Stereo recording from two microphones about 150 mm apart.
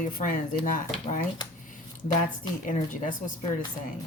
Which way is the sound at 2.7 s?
60° left (ahead or behind).